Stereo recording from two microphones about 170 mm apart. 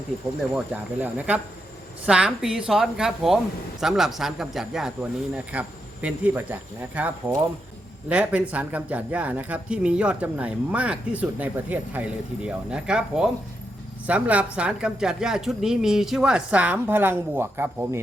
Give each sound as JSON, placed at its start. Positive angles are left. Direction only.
{"t": 0.5, "sound": "a woman's voice", "side_deg": -10}